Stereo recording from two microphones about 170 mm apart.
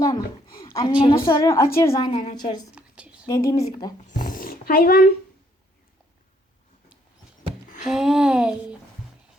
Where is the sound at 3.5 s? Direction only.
20° left (ahead or behind).